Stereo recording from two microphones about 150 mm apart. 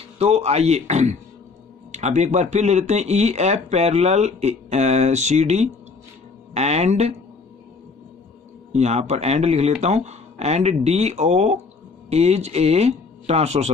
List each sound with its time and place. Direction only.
0.2 s speech: 45° right (ahead or behind)
8.7 s speech: 50° right (ahead or behind)